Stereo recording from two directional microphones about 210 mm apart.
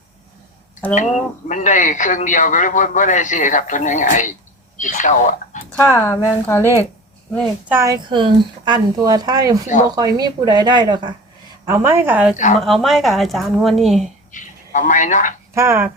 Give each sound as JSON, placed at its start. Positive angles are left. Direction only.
{"t": 0.9, "sound": "speech", "side_deg": 35}
{"t": 5.7, "sound": "speech", "side_deg": 10}
{"t": 7.7, "sound": "a woman's voice", "side_deg": -15}
{"t": 14.3, "sound": "speech", "side_deg": 35}
{"t": 15.5, "sound": "a woman's voice", "side_deg": -10}